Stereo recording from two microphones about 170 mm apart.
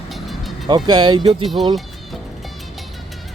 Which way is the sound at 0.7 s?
25° right (ahead or behind).